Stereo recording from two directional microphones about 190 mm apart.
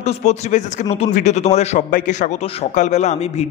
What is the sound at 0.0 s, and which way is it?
A man's voice, 35° left (ahead or behind).